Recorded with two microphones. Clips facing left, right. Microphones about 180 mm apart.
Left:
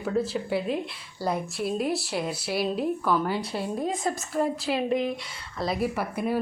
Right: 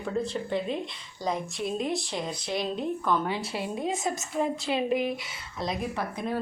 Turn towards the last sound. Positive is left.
turn(degrees=10)  # may be behind; listen again after turning